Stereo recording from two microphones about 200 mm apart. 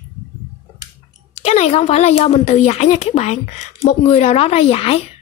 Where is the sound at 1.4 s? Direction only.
35° left (ahead or behind).